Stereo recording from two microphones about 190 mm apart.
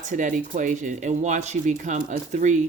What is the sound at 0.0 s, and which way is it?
Speech, 40° right (ahead or behind).